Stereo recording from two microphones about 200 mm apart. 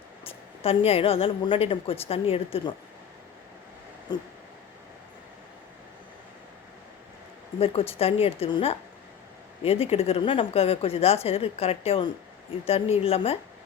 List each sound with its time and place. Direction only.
0.3 s a woman's voice: 30° left (ahead or behind)
4.1 s a woman's voice: 20° left (ahead or behind)
7.6 s a woman's voice: 30° left (ahead or behind)